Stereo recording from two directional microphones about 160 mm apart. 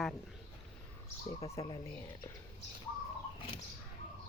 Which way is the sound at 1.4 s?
40° left (ahead or behind).